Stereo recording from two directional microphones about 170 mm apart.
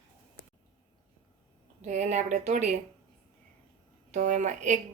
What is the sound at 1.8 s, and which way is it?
Speech, 45° right (ahead or behind).